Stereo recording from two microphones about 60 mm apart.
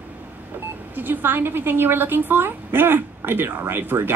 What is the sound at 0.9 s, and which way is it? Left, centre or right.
Speech, right.